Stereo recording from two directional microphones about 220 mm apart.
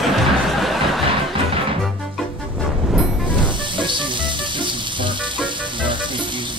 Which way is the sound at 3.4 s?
20° right (ahead or behind).